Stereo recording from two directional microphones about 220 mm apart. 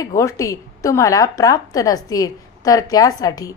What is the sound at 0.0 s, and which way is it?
A woman's voice, 15° left (ahead or behind).